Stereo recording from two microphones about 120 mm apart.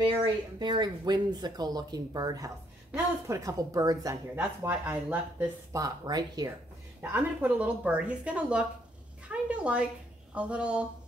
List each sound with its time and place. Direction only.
0.0 s speech: 40° right (ahead or behind)
4.4 s speech: 15° right (ahead or behind)
5.7 s speech: 30° right (ahead or behind)
7.0 s speech: 15° right (ahead or behind)